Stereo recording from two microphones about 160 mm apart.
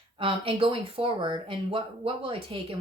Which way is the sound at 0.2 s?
35° right (ahead or behind).